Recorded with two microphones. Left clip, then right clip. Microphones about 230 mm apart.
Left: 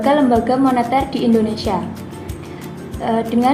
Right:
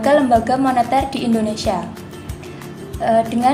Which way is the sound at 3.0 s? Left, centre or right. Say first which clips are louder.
Right 2 dB; centre.